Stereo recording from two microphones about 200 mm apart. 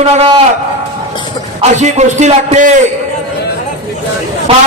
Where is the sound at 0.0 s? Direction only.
30° right (ahead or behind).